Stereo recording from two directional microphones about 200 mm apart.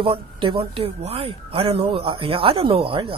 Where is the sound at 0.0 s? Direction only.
25° right (ahead or behind).